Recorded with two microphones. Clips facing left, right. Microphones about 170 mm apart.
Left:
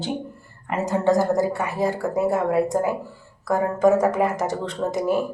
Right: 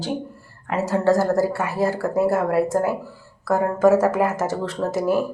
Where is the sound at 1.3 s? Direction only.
5° right (ahead or behind).